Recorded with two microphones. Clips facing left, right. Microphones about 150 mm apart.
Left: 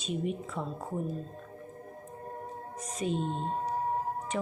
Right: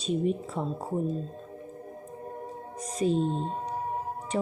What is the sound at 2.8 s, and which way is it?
Speech, 35° right (ahead or behind).